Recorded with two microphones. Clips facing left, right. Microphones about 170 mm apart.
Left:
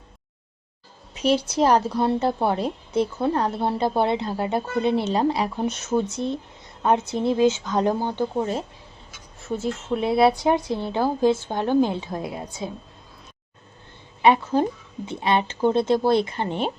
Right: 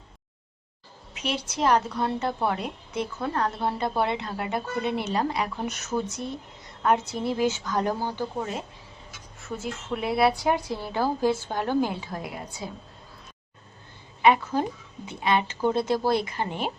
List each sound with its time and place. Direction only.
1.1 s a woman's voice: 35° left (ahead or behind)
9.5 s a woman's voice: 30° left (ahead or behind)
14.2 s a woman's voice: 30° left (ahead or behind)